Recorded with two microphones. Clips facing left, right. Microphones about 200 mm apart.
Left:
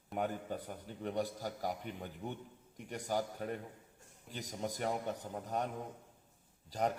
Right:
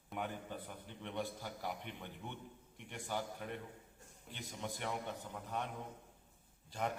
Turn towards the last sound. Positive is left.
turn(degrees=40)  # may be behind; listen again after turning